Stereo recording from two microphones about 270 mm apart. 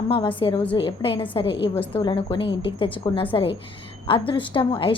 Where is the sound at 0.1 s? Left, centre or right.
Centre.